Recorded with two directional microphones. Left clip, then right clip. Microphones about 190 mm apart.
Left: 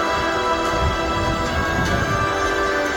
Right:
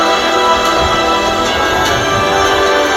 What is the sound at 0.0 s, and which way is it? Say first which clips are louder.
Music: right 9 dB; 45° right (ahead or behind).